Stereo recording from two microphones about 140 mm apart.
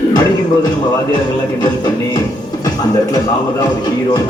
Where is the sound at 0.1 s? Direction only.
30° left (ahead or behind).